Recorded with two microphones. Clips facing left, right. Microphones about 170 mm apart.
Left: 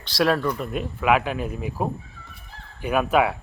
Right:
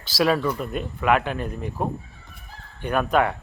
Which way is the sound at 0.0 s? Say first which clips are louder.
Even; centre (ahead or behind).